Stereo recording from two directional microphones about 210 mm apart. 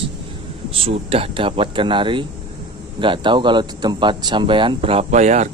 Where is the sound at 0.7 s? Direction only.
25° right (ahead or behind).